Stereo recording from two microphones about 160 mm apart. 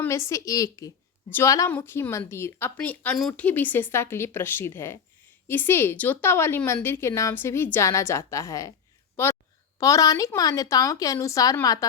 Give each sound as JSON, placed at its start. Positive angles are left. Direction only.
{"t": 0.0, "sound": "a woman's voice", "side_deg": 20}